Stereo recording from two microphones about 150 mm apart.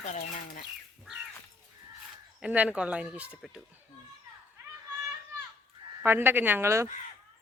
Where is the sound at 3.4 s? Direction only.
Centre (ahead or behind).